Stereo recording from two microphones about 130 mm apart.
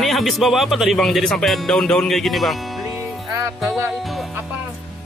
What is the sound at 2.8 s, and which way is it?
Music, 25° right (ahead or behind).